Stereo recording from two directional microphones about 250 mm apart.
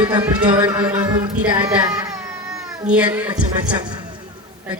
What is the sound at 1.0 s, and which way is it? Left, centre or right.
Baby cry, centre.